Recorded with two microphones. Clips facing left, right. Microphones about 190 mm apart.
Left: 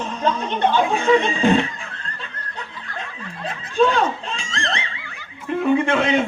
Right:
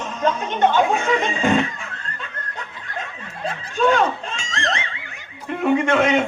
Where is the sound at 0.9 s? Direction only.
30° left (ahead or behind).